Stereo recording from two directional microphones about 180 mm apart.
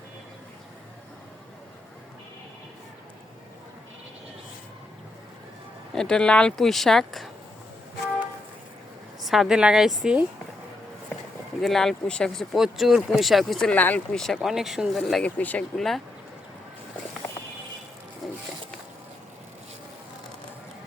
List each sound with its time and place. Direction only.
5.9 s speech: 5° left (ahead or behind)
9.2 s speech: centre (ahead or behind)
11.6 s speech: centre (ahead or behind)